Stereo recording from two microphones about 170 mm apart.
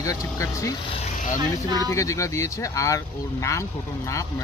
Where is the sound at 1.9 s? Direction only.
20° left (ahead or behind).